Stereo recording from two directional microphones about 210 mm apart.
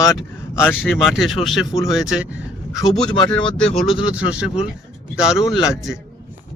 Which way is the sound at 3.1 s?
25° left (ahead or behind).